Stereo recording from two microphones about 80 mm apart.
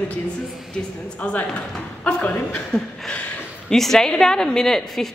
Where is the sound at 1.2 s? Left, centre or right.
Centre.